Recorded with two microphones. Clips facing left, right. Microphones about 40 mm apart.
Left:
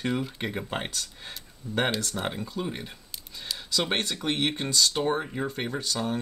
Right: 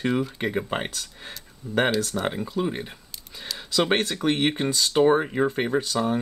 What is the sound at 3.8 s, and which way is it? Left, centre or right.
Speech, centre.